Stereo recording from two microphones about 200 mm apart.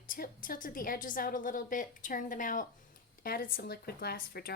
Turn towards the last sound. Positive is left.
turn(degrees=50)  # may be behind; listen again after turning